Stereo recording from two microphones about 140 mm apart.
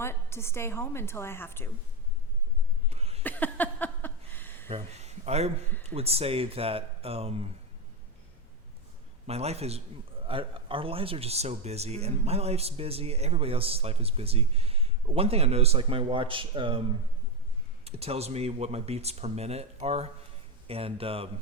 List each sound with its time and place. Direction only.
0.0 s a woman's voice: 20° left (ahead or behind)
2.9 s cough: 50° right (ahead or behind)
3.2 s a sound: 10° left (ahead or behind)
4.7 s speech: 50° right (ahead or behind)
9.2 s speech: 50° right (ahead or behind)
17.8 s speech: 45° right (ahead or behind)